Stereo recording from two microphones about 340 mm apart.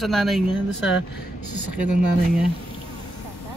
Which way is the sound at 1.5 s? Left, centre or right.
Right.